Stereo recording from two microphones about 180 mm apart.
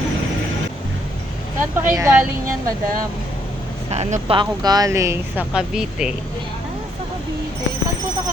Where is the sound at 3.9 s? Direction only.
35° right (ahead or behind); by 6.1 s 5° right (ahead or behind).